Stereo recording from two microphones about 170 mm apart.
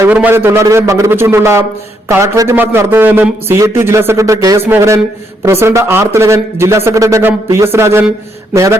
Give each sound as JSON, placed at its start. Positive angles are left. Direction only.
{"t": 0.0, "sound": "a man's voice", "side_deg": -10}